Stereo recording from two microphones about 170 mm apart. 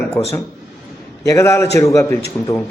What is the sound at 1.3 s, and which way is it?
Speech, 15° left (ahead or behind).